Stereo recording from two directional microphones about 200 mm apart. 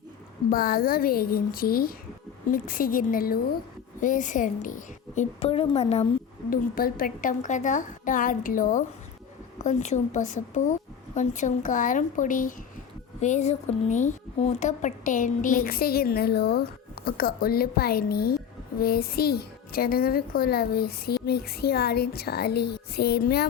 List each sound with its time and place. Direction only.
0.5 s a woman's voice: 45° left (ahead or behind); by 6.1 s 30° left (ahead or behind)
6.5 s a woman's voice: 45° left (ahead or behind)